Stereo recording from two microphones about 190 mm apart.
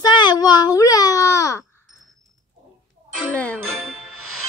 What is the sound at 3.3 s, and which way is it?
Ding, 5° left (ahead or behind).